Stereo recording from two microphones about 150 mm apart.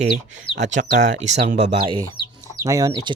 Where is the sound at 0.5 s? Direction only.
55° right (ahead or behind).